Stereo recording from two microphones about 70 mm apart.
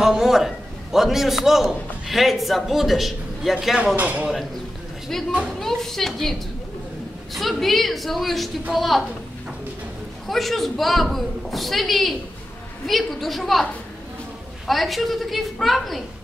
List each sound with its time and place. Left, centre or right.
0.0 s a man's voice: centre
3.9 s a man's voice: right
5.6 s a man's voice: centre
7.3 s a man's voice: centre
10.2 s a man's voice: centre
14.7 s a man's voice: centre